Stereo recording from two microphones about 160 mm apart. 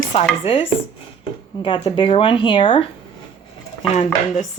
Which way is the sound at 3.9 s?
45° left (ahead or behind).